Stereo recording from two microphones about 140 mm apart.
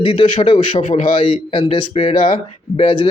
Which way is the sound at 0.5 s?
60° left (ahead or behind).